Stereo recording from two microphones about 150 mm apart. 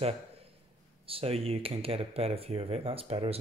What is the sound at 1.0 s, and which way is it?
Speech, 40° right (ahead or behind).